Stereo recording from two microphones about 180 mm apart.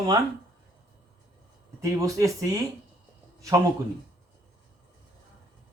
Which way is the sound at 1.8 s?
20° right (ahead or behind).